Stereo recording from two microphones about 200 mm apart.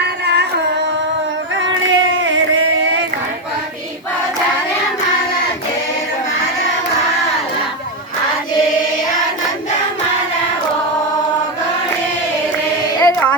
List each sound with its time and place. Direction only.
0.0 s music: 55° right (ahead or behind)
1.5 s a sound: 70° right (ahead or behind)
13.0 s child singing: 15° left (ahead or behind)